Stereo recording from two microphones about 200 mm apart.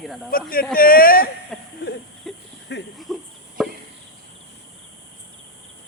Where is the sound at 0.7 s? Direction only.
45° left (ahead or behind).